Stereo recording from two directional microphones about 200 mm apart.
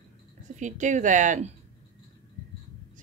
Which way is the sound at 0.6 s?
40° right (ahead or behind).